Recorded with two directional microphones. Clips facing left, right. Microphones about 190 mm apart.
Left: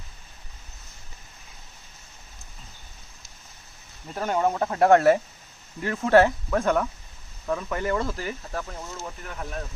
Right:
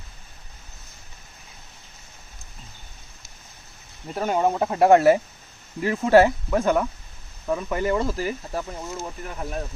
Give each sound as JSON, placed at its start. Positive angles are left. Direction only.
{"t": 4.1, "sound": "speech", "side_deg": -10}